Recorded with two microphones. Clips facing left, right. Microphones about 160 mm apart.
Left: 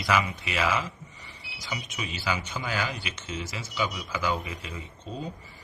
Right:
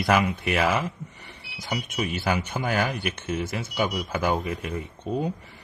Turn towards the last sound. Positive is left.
turn(degrees=-60)  # may be behind; listen again after turning